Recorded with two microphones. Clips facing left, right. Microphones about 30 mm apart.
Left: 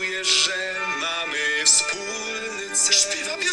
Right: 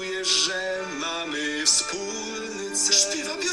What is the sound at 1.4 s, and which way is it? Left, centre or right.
Music, left.